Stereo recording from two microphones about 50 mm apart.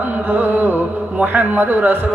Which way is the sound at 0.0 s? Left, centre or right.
Right.